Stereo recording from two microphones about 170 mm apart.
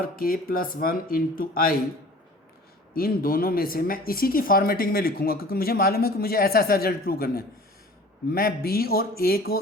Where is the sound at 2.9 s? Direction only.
60° left (ahead or behind).